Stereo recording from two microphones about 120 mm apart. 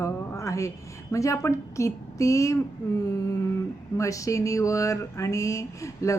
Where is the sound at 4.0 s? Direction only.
25° left (ahead or behind).